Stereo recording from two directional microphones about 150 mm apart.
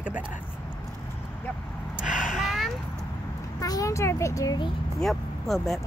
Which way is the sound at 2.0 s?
60° left (ahead or behind).